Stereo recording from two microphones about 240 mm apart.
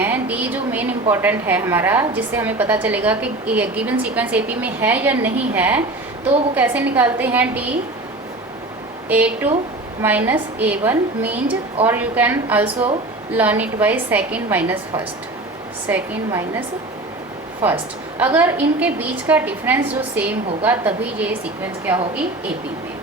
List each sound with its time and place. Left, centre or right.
0.0 s a sound: centre
1.1 s a woman's voice: centre
9.0 s a woman's voice: centre